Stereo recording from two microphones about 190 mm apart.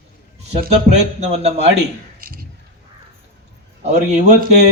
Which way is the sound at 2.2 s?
50° right (ahead or behind).